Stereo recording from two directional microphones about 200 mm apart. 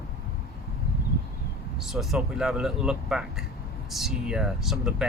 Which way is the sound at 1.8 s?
Centre (ahead or behind).